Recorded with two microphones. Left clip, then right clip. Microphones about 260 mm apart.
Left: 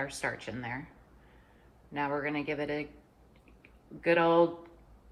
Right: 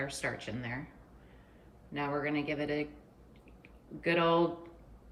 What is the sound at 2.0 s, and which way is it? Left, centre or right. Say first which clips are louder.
Speech: left 1 dB; left.